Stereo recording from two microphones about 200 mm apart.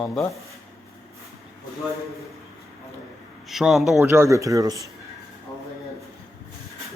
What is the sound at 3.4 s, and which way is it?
Speech, centre (ahead or behind).